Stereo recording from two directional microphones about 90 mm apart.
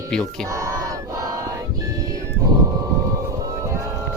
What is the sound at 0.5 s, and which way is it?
Battle cry, 35° right (ahead or behind).